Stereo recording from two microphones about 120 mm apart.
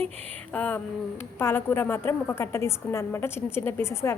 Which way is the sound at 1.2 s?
20° left (ahead or behind).